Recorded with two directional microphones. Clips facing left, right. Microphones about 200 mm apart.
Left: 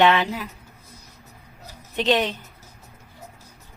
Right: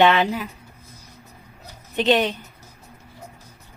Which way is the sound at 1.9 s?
Centre (ahead or behind).